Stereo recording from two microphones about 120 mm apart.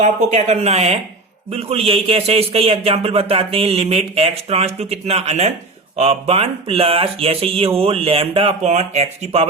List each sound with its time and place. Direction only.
0.0 s a man's voice: 85° right; by 8.5 s 50° right (ahead or behind)
8.6 s a man's voice: 65° right (ahead or behind)